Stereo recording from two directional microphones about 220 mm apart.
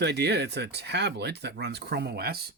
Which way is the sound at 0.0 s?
50° right (ahead or behind).